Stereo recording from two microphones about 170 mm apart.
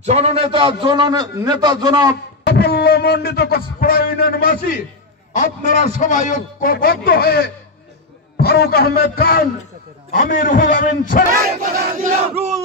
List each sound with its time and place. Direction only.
0.0 s a man's voice: 40° right (ahead or behind)
2.4 s a man's voice: 70° left (ahead or behind); by 11.2 s 55° left (ahead or behind)
11.3 s battle cry: 60° right (ahead or behind)